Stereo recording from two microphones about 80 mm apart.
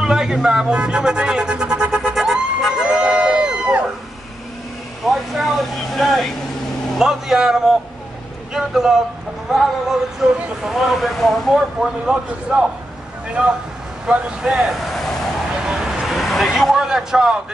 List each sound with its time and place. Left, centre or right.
0.0 s music: centre
5.0 s vehicle: centre
7.0 s speech: centre
10.2 s speech: centre
12.1 s speech: centre
15.6 s vehicle: centre
16.5 s speech: centre